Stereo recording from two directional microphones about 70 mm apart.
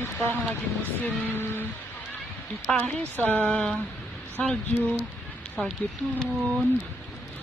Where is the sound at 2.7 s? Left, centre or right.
Centre.